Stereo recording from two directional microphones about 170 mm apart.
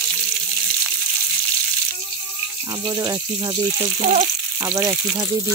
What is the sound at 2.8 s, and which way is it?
Speech, 20° right (ahead or behind).